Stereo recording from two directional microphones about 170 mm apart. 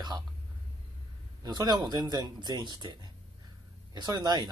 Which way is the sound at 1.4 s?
25° right (ahead or behind).